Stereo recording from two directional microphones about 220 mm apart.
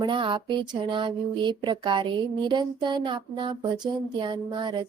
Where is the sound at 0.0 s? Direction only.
20° right (ahead or behind).